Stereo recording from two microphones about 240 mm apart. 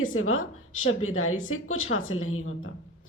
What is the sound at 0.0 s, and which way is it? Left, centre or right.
A woman's voice, left.